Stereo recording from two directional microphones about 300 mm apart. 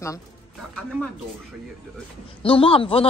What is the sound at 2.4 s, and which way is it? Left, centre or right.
Speech, centre.